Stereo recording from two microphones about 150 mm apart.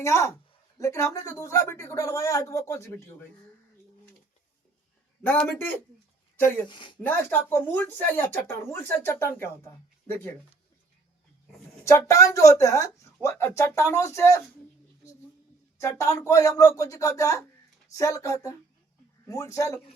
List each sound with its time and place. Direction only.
0.0 s a man's voice: 20° left (ahead or behind)
5.2 s speech: 10° left (ahead or behind)
6.7 s speech: 30° left (ahead or behind)
7.0 s speech: 15° left (ahead or behind)
11.8 s a man's voice: 20° left (ahead or behind)
15.8 s a man's voice: 20° left (ahead or behind)